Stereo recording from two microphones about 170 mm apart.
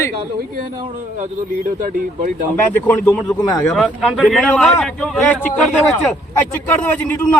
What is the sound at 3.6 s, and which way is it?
A man's voice, centre (ahead or behind).